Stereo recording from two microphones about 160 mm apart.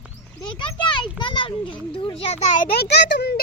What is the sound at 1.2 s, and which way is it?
Children playing, 30° left (ahead or behind).